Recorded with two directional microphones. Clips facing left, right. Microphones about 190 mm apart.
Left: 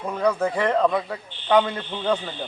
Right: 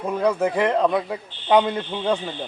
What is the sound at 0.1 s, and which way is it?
A man's voice, 15° right (ahead or behind).